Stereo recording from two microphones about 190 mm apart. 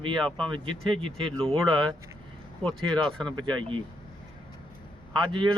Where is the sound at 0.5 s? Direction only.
25° right (ahead or behind).